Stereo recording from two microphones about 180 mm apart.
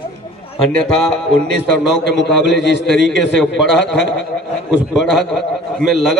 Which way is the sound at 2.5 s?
80° left.